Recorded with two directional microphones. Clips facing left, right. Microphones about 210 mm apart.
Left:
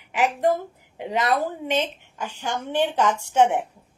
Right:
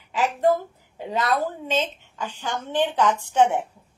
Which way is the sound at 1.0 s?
15° left (ahead or behind).